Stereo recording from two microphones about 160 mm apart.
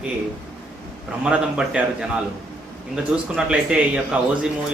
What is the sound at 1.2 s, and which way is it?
A man's voice, 5° right (ahead or behind).